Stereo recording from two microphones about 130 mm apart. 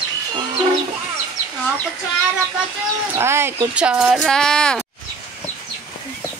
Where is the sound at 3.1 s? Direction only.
20° right (ahead or behind).